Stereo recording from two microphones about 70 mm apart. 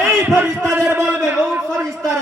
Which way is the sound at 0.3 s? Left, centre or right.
Right.